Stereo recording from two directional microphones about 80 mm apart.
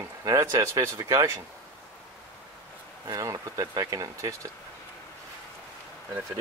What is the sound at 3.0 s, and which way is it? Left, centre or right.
Speech, right.